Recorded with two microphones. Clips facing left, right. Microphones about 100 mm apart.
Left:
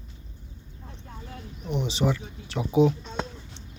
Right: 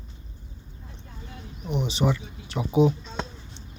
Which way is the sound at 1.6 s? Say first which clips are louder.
Right 1 dB; 5° right (ahead or behind).